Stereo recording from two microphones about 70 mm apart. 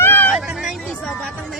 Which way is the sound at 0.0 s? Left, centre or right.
Left.